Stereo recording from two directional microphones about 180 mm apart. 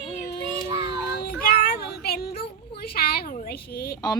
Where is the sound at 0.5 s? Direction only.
25° right (ahead or behind).